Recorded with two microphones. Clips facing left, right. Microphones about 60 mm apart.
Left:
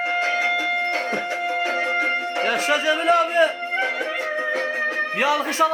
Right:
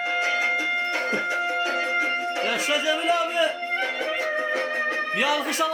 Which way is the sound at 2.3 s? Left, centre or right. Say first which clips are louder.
Left 6 dB; left.